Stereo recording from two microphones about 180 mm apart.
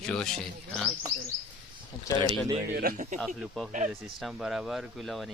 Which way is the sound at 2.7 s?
50° right (ahead or behind).